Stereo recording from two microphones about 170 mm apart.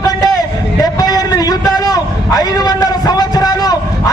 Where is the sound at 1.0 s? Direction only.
20° left (ahead or behind).